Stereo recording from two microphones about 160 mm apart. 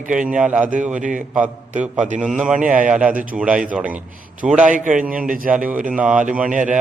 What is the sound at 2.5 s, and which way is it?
Speech, 55° right (ahead or behind).